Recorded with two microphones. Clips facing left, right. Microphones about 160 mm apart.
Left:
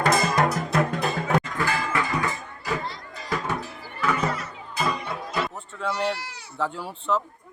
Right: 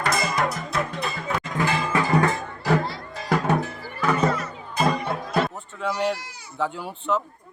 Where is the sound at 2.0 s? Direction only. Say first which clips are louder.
Right 7 dB; 60° right (ahead or behind).